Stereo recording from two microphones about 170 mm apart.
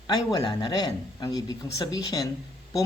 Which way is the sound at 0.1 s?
20° left (ahead or behind).